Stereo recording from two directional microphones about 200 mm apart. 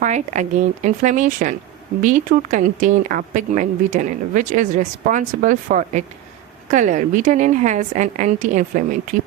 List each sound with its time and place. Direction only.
0.0 s speech: 35° right (ahead or behind)